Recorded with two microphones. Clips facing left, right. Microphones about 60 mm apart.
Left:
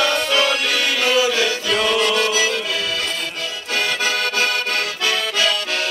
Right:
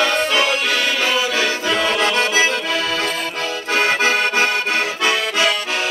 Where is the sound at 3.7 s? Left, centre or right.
Right.